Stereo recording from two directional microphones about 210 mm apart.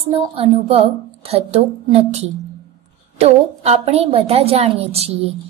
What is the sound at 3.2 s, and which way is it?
A woman's voice, 30° right (ahead or behind).